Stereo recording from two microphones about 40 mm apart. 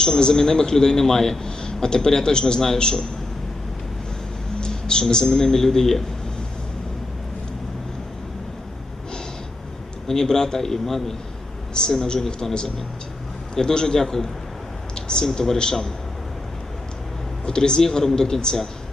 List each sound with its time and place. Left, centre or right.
0.0 s a man's voice: centre
4.6 s speech: centre
10.1 s a man's voice: centre
13.6 s a man's voice: centre
14.9 s a sound: centre
15.3 s a man's voice: centre
17.4 s a man's voice: centre